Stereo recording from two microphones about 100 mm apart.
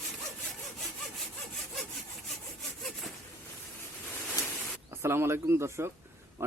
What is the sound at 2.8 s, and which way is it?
Sawing, centre (ahead or behind).